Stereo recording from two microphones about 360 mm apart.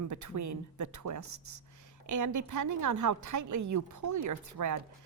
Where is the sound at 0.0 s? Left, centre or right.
Right.